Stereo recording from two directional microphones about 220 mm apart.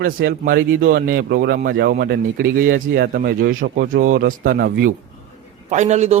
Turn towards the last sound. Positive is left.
turn(degrees=-30)  # may be behind; listen again after turning